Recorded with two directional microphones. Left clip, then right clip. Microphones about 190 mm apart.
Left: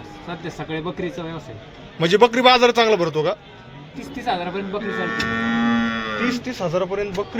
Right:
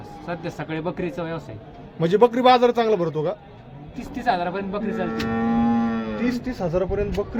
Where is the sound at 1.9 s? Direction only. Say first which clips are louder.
Left 2 dB; 10° right (ahead or behind).